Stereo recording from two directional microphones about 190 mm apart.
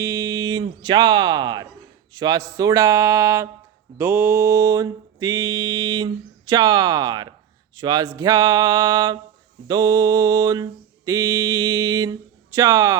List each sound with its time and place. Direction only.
0.0 s speech: 15° right (ahead or behind)
3.9 s mantra: 10° right (ahead or behind)